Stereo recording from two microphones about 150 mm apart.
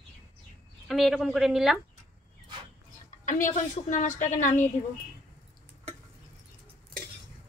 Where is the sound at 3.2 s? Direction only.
60° left (ahead or behind).